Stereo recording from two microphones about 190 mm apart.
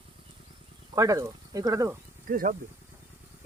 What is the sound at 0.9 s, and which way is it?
Speech, 20° right (ahead or behind).